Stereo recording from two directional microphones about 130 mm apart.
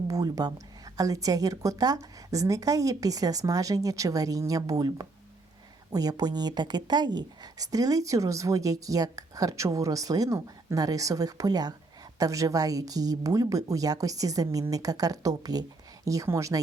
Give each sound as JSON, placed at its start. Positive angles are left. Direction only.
{"t": 0.1, "sound": "a woman's voice", "side_deg": -30}